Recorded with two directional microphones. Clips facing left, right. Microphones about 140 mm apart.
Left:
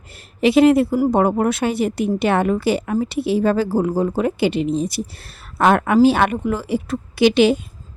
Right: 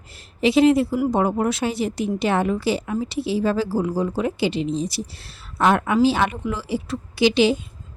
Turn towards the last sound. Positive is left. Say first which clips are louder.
# left 3 dB
turn(degrees=60)  # may be behind; listen again after turning